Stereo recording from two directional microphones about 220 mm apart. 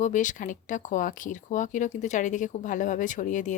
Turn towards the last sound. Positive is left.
turn(degrees=35)  # may be behind; listen again after turning